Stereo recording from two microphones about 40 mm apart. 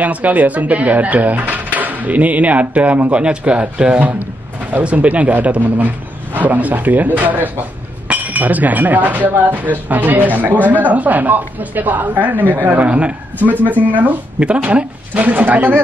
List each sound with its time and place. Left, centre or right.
0.0 s speech: right
13.7 s speech: right
14.4 s speech: right